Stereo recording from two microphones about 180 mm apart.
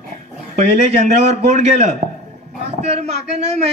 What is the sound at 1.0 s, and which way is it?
Speech, 40° right (ahead or behind).